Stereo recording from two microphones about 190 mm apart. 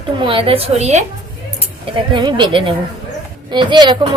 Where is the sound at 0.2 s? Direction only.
30° right (ahead or behind).